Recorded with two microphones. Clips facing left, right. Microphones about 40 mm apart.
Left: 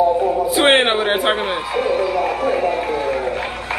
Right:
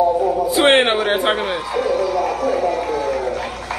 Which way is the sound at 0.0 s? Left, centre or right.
Left.